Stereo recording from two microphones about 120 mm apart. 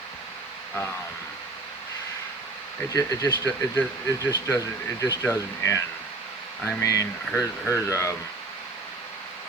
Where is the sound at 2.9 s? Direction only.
25° left (ahead or behind).